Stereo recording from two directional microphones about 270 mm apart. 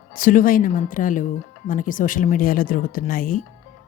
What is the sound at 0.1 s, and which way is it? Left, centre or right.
Speech, left.